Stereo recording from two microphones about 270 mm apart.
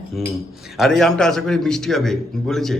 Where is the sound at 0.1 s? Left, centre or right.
Centre.